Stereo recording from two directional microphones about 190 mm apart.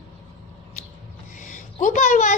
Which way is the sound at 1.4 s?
40° left (ahead or behind).